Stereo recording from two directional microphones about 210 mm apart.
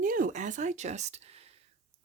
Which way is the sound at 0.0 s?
40° right (ahead or behind).